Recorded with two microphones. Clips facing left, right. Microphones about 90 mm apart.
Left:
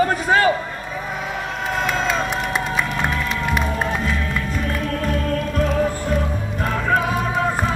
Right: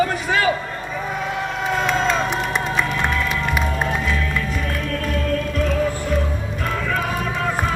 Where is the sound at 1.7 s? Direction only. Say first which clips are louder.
Right 2 dB; 5° left (ahead or behind).